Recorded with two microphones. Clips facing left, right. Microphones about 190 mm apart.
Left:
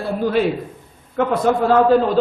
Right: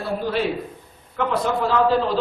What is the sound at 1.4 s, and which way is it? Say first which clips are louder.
Speech: left 6 dB; 50° left (ahead or behind).